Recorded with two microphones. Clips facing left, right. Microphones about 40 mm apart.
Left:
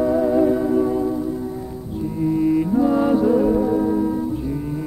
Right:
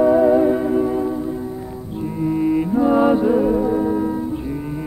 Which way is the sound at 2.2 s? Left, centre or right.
Centre.